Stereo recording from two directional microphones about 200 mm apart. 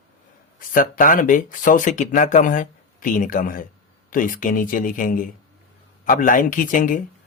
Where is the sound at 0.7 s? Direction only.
45° left (ahead or behind).